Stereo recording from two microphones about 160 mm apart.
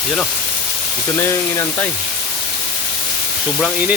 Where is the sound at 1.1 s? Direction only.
15° left (ahead or behind).